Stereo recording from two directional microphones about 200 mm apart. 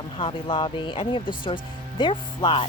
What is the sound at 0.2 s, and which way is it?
Speech, 25° left (ahead or behind).